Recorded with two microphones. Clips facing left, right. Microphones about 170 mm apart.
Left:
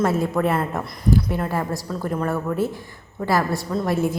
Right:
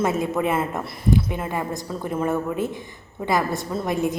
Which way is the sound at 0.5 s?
5° right (ahead or behind).